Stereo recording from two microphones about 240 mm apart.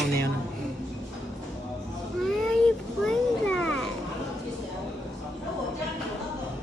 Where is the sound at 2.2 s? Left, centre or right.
Centre.